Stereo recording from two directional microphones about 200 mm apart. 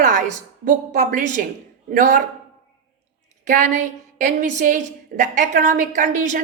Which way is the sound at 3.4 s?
40° right (ahead or behind).